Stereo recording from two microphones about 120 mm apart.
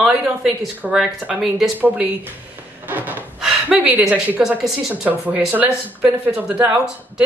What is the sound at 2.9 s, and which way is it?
Gasp, 15° right (ahead or behind).